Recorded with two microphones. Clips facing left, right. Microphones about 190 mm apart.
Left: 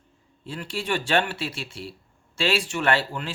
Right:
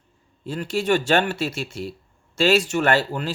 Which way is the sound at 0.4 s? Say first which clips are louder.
Right 7 dB; 45° right (ahead or behind).